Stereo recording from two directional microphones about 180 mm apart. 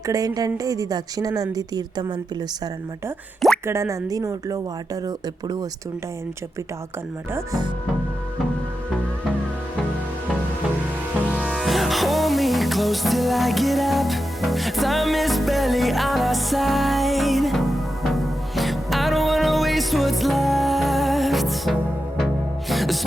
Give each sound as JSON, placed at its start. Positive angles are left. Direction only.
{"t": 0.0, "sound": "a woman's voice", "side_deg": -20}
{"t": 3.7, "sound": "a woman's voice", "side_deg": -15}
{"t": 7.3, "sound": "a woman's voice", "side_deg": -20}
{"t": 11.3, "sound": "music", "side_deg": -5}